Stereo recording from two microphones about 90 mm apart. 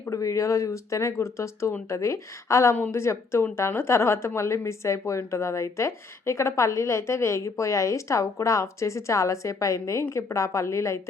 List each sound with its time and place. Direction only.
0.1 s a woman's voice: 40° left (ahead or behind)